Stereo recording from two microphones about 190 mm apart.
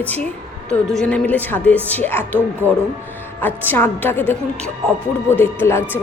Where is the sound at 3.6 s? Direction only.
10° left (ahead or behind).